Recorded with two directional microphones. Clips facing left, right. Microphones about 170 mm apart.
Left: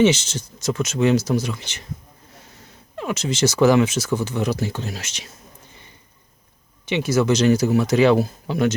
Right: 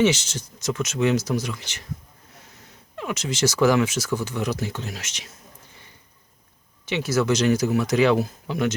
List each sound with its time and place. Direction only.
0.0 s speech: 25° left (ahead or behind)
3.0 s speech: 30° left (ahead or behind)
6.8 s speech: 20° left (ahead or behind); by 8.7 s 35° left (ahead or behind)